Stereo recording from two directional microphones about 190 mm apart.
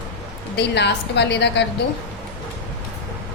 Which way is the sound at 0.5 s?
65° left (ahead or behind).